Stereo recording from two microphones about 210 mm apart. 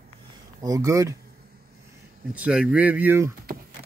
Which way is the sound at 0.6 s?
15° right (ahead or behind).